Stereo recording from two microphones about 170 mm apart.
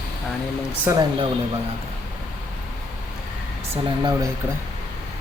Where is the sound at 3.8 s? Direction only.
25° right (ahead or behind).